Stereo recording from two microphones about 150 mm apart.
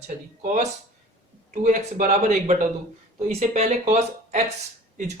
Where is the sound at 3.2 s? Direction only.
45° right (ahead or behind).